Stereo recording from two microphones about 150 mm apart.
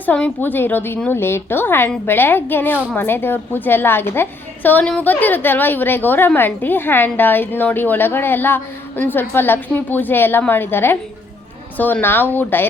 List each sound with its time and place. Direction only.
0.0 s a woman's voice: 10° left (ahead or behind)